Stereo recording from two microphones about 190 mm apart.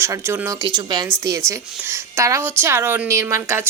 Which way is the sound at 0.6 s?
20° right (ahead or behind).